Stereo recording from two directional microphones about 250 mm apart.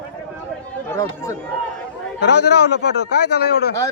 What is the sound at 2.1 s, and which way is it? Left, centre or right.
A man's voice, left.